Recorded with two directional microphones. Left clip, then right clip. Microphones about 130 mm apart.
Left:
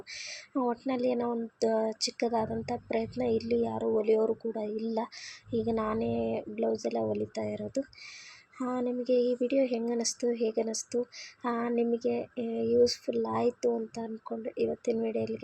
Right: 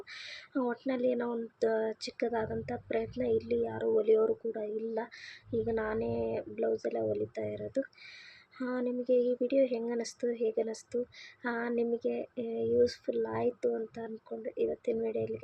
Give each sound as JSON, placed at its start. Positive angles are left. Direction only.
{"t": 0.1, "sound": "speech", "side_deg": 20}